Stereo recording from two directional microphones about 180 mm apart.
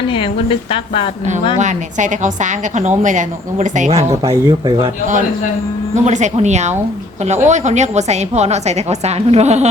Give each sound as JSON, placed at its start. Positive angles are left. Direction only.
{"t": 0.1, "sound": "a woman's voice", "side_deg": 30}
{"t": 1.5, "sound": "a woman's voice", "side_deg": -45}
{"t": 4.1, "sound": "speech", "side_deg": -20}
{"t": 5.9, "sound": "a woman's voice", "side_deg": -40}